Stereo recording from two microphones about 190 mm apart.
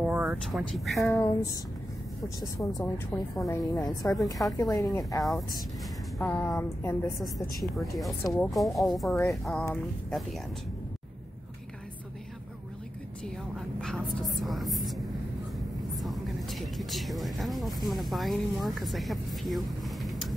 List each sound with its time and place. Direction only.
0.0 s speech: 5° right (ahead or behind)
1.1 s a woman's voice: 15° left (ahead or behind)
7.7 s speech: centre (ahead or behind)
13.7 s speech: centre (ahead or behind)
16.0 s speech: centre (ahead or behind)